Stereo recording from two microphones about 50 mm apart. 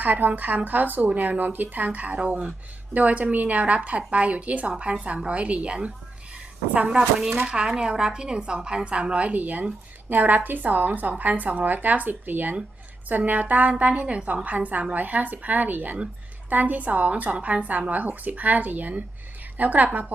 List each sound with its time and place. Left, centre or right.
0.0 s a woman's voice: right